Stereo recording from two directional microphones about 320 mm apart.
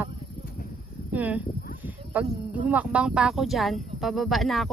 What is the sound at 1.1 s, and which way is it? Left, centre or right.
Speech, centre.